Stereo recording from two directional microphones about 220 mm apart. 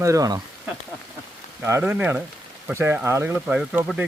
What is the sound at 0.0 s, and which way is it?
Speech, 15° right (ahead or behind).